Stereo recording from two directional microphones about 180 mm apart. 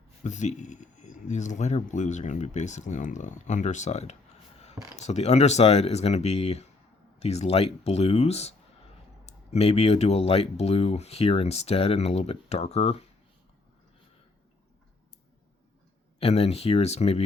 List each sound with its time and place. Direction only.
0.2 s speech: 40° left (ahead or behind)
16.2 s speech: 35° left (ahead or behind)